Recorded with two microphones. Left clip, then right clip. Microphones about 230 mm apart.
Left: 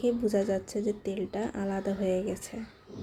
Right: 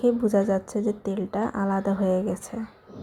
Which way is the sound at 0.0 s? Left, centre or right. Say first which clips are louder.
Right 6 dB; centre.